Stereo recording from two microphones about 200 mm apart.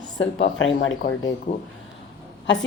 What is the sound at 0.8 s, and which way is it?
Speech, 65° left (ahead or behind).